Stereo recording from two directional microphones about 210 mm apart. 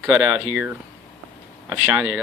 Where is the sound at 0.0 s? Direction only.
5° right (ahead or behind).